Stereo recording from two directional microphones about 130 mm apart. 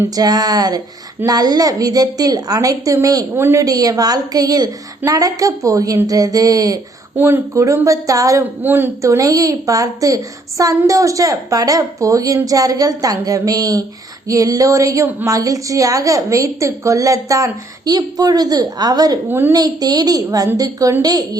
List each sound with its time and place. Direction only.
0.2 s a woman's voice: 30° right (ahead or behind)
8.6 s a woman's voice: 15° right (ahead or behind)
19.3 s a woman's voice: 15° right (ahead or behind)
19.5 s a woman's voice: 30° right (ahead or behind)